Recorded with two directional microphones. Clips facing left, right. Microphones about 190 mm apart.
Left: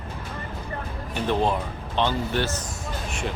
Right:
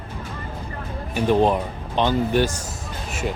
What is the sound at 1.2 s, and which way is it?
Speech, 15° right (ahead or behind).